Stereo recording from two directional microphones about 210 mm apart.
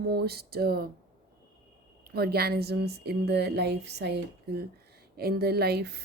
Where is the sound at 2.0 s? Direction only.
50° right (ahead or behind).